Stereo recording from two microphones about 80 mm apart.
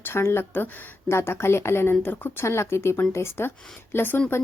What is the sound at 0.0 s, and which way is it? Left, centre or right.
Speech, left.